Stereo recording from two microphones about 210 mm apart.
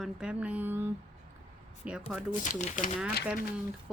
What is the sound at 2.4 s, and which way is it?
Speech, 35° left (ahead or behind).